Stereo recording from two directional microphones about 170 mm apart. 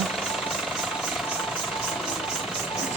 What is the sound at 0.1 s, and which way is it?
Vehicle, centre (ahead or behind).